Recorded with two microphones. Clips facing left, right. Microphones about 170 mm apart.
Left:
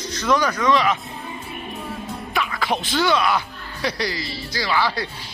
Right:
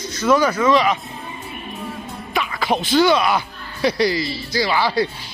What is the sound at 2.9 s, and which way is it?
Speech, 15° right (ahead or behind).